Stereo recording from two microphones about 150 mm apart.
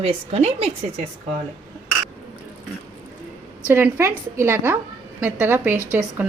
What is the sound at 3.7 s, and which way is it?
A woman's voice, 15° right (ahead or behind).